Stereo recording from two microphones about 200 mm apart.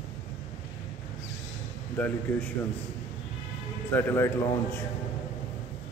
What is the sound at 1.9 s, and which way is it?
Speech, 10° left (ahead or behind).